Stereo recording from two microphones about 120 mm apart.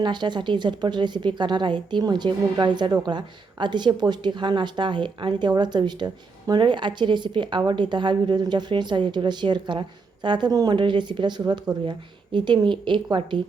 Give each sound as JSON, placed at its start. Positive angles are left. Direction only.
{"t": 0.0, "sound": "a woman's voice", "side_deg": -40}